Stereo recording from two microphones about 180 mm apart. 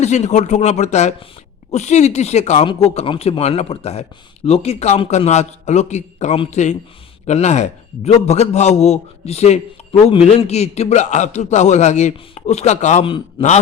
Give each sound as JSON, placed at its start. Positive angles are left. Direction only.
{"t": 0.0, "sound": "a man's voice", "side_deg": 40}